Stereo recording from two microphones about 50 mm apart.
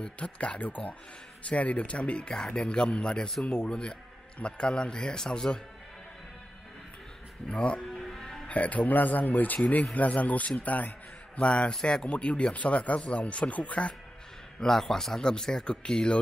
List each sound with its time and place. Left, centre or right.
0.0 s a man's voice: left
7.4 s a man's voice: left
7.9 s music: centre
8.5 s a man's voice: left
14.6 s speech: centre